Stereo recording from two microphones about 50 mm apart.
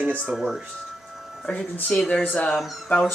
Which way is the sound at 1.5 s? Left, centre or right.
Left.